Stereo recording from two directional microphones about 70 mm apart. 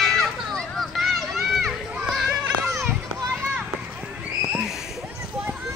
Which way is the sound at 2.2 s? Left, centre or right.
Right.